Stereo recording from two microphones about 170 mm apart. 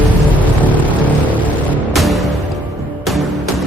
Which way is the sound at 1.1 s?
10° left (ahead or behind).